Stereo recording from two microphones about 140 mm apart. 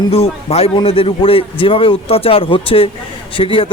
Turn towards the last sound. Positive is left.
turn(degrees=40)  # may be behind; listen again after turning